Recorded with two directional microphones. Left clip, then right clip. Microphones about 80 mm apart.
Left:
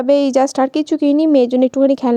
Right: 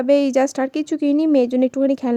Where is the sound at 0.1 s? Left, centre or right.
Left.